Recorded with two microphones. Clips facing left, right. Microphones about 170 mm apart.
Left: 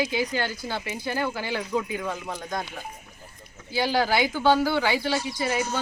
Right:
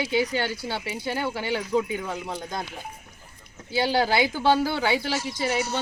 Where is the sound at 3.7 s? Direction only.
25° right (ahead or behind).